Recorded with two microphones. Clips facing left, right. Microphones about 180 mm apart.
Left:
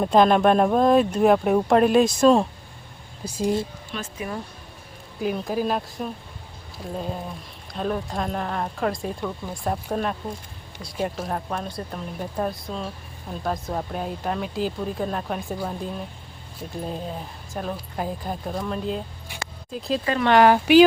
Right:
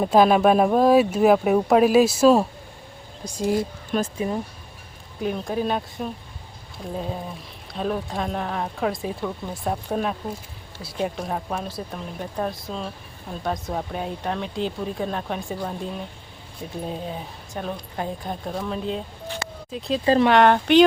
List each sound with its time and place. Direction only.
0.0 s speech: 5° right (ahead or behind)
3.2 s speech: 5° left (ahead or behind)
3.9 s speech: 40° right (ahead or behind)
5.2 s speech: 5° left (ahead or behind)
19.4 s music: 30° right (ahead or behind)
20.2 s speech: 5° left (ahead or behind)